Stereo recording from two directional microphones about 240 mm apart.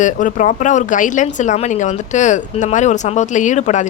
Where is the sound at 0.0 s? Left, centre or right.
Left.